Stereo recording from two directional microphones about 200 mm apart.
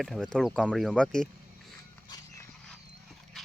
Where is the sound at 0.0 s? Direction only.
Centre (ahead or behind).